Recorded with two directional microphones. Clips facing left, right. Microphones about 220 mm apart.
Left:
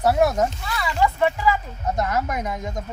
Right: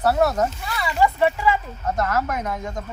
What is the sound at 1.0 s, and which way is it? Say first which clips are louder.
Speech: right 2 dB; 5° right (ahead or behind).